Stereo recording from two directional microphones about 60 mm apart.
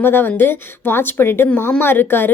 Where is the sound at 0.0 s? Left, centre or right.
Left.